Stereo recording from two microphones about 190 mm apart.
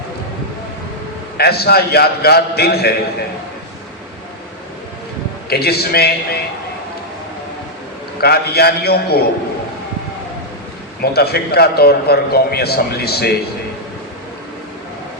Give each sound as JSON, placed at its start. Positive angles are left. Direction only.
{"t": 1.4, "sound": "a man's voice", "side_deg": 55}
{"t": 5.5, "sound": "a man's voice", "side_deg": 55}
{"t": 8.2, "sound": "a man's voice", "side_deg": 55}
{"t": 11.0, "sound": "a man's voice", "side_deg": 55}